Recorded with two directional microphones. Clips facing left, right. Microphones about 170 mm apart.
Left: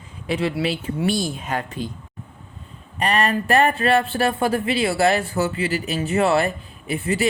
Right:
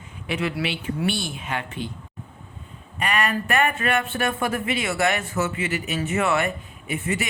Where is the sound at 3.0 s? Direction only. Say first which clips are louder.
Left 4 dB; 35° left (ahead or behind).